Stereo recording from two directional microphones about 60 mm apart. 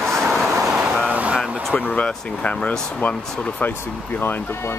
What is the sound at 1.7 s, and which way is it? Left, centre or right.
Speech, left.